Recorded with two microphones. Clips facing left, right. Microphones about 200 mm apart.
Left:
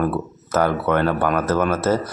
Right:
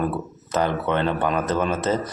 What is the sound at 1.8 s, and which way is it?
Speech, 5° left (ahead or behind).